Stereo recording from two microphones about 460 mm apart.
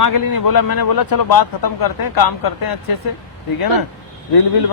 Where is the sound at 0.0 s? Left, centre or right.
Left.